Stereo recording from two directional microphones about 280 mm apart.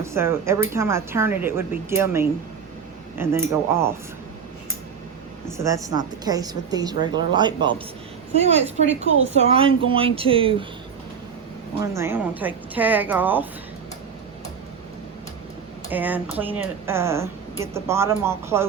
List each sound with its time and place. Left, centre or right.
0.0 s a woman's voice: centre
5.5 s a woman's voice: centre
11.8 s a woman's voice: centre
15.9 s a woman's voice: centre